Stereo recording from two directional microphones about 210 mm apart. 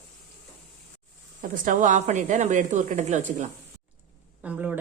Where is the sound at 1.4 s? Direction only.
40° right (ahead or behind).